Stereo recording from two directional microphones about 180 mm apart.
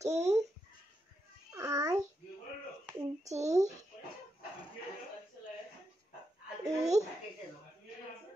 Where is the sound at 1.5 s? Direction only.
20° right (ahead or behind).